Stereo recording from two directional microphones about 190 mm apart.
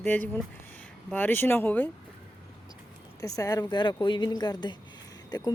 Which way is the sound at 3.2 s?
20° left (ahead or behind).